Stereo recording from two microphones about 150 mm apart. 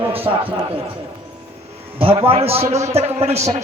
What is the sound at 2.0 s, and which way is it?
A man's voice, 35° right (ahead or behind).